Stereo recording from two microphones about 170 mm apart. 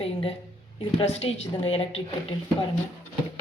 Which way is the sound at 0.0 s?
35° left (ahead or behind).